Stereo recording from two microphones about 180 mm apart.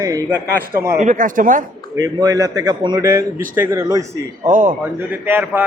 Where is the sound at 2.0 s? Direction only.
20° right (ahead or behind).